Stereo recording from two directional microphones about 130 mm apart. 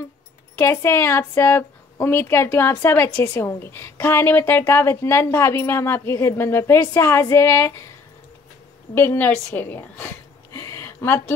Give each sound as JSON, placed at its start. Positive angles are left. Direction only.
{"t": 0.6, "sound": "speech", "side_deg": 20}
{"t": 8.9, "sound": "a woman's voice", "side_deg": 20}